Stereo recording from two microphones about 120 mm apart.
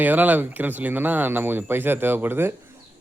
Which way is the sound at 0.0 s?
15° right (ahead or behind).